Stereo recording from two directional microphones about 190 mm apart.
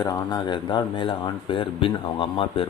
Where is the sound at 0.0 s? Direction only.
20° left (ahead or behind).